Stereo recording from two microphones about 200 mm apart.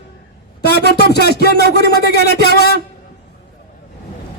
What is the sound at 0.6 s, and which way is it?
A man's voice, 55° left (ahead or behind).